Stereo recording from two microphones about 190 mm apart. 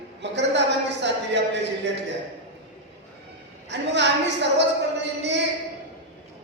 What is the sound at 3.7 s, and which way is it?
Speech, 65° right (ahead or behind).